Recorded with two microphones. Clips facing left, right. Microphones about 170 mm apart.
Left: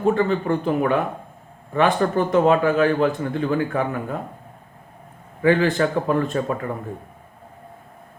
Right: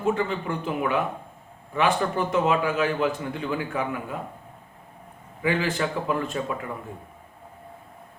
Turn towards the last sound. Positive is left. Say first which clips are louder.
# left 5 dB
turn(degrees=45)  # may be behind; listen again after turning